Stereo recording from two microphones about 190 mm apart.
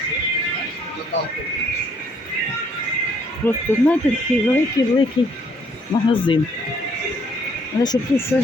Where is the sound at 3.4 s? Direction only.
10° left (ahead or behind).